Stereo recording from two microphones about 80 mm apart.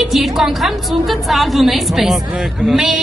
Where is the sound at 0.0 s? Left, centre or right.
Centre.